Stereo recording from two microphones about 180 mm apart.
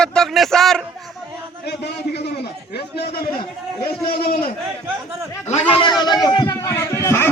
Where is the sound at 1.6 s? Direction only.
65° left (ahead or behind).